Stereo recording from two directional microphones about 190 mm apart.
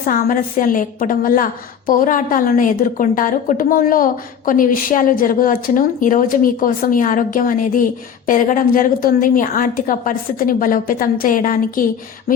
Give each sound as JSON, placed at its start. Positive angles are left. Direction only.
{"t": 0.0, "sound": "a woman's voice", "side_deg": 45}